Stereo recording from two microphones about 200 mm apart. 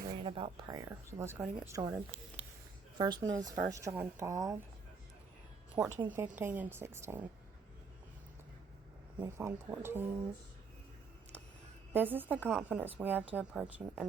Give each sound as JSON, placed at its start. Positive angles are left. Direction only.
{"t": 0.1, "sound": "a woman's voice", "side_deg": -25}
{"t": 3.0, "sound": "a woman's voice", "side_deg": -20}
{"t": 5.8, "sound": "a woman's voice", "side_deg": -10}
{"t": 9.2, "sound": "a woman's voice", "side_deg": -15}
{"t": 11.9, "sound": "a woman's voice", "side_deg": -10}